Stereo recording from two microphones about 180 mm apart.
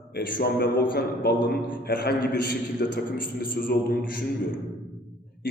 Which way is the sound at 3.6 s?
50° left (ahead or behind).